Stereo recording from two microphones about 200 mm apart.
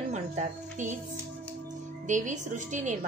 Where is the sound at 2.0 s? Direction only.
40° right (ahead or behind).